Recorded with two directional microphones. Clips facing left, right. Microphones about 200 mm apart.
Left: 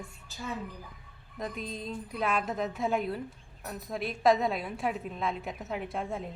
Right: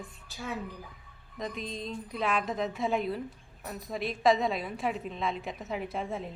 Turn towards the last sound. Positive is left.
turn(degrees=0)  # may be behind; listen again after turning